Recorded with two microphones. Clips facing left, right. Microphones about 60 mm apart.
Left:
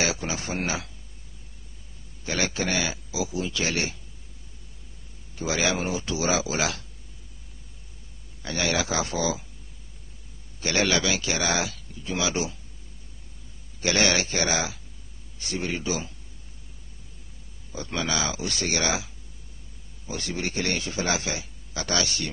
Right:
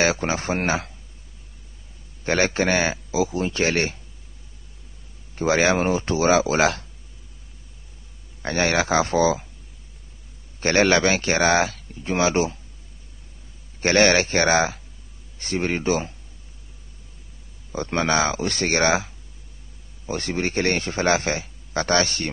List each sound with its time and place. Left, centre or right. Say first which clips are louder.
0.0 s a man's voice: right 6 dB; right
2.2 s speech: right 7 dB; right
5.3 s speech: right 7 dB; right
8.4 s speech: right 5 dB; right
10.6 s a man's voice: right 6 dB; right
13.7 s speech: right 6 dB; right
17.7 s a man's voice: right 7 dB; right